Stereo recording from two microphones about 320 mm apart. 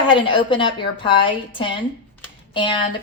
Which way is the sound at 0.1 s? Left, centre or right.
Centre.